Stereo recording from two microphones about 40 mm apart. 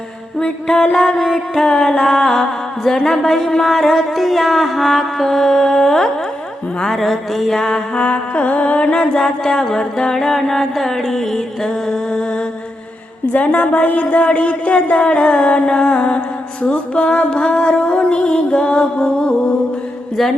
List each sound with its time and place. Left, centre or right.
0.3 s music: left
1.1 s music: centre
7.7 s a sound: left
9.2 s music: centre
11.7 s music: left
13.3 s a sound: left
16.6 s music: left